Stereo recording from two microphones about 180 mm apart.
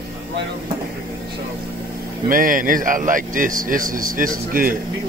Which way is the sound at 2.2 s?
50° right (ahead or behind).